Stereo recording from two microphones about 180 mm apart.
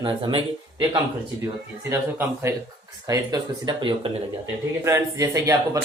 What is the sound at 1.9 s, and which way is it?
A man's voice, 15° right (ahead or behind).